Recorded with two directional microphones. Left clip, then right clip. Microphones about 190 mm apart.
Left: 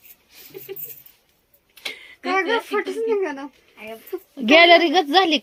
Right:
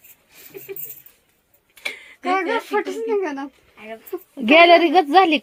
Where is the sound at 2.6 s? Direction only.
55° right (ahead or behind).